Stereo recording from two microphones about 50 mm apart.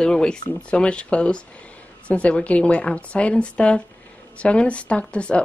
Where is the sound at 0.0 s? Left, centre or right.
Centre.